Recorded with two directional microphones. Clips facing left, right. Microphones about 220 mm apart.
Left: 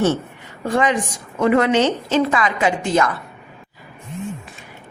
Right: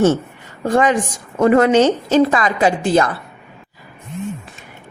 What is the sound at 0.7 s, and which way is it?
A woman's voice, 45° right (ahead or behind).